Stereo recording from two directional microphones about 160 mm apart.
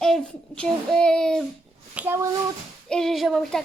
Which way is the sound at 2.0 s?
15° right (ahead or behind).